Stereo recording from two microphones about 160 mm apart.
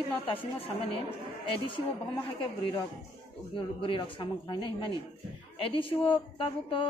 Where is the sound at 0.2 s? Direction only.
35° left (ahead or behind).